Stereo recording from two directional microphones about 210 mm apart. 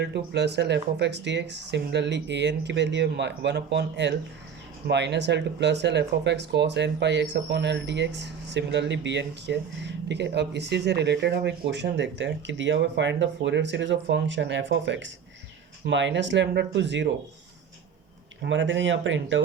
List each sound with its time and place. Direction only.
0.0 s speech: 55° right (ahead or behind)
18.4 s speech: 60° right (ahead or behind)